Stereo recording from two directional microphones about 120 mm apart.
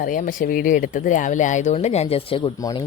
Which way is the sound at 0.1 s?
90° left.